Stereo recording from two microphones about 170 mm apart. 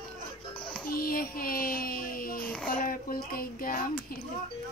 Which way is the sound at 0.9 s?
60° left (ahead or behind).